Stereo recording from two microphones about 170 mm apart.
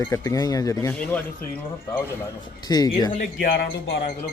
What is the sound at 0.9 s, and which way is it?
Speech, 10° left (ahead or behind).